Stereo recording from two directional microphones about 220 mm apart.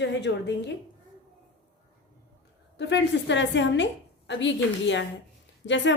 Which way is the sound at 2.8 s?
55° left (ahead or behind).